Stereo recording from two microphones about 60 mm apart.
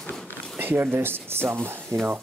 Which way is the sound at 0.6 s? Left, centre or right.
Right.